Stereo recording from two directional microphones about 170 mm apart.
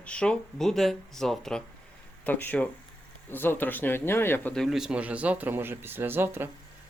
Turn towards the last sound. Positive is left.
turn(degrees=-10)  # may be behind; listen again after turning